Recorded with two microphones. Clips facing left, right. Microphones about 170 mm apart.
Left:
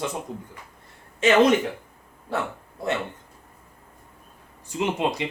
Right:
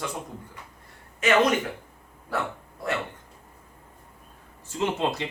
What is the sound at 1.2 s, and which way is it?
Speech, 25° left (ahead or behind).